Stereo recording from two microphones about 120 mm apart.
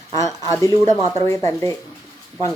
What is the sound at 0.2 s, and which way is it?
Speech, 25° left (ahead or behind).